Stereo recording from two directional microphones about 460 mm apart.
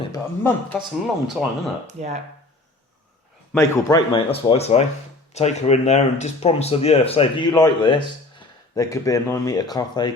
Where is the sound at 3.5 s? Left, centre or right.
Centre.